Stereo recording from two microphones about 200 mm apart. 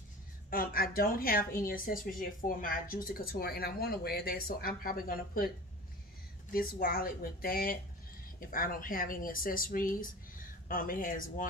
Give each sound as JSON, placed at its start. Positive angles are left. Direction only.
{"t": 0.5, "sound": "speech", "side_deg": 45}
{"t": 6.5, "sound": "speech", "side_deg": 45}